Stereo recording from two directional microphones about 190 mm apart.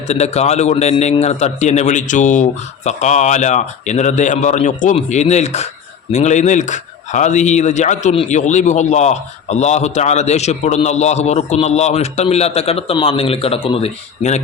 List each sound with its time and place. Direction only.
0.1 s speech: 35° left (ahead or behind)